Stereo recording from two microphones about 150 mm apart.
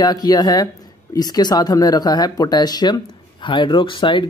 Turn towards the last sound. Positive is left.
turn(degrees=35)  # may be behind; listen again after turning